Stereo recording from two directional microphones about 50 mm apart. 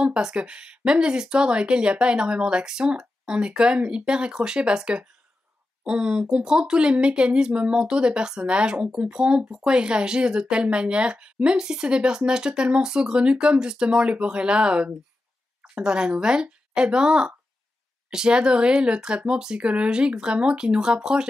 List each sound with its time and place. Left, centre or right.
0.0 s speech: centre